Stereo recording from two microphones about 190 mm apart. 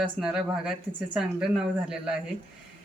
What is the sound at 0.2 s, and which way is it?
Speech, 5° right (ahead or behind).